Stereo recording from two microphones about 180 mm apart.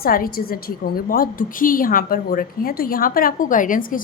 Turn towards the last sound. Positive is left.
turn(degrees=50)  # may be behind; listen again after turning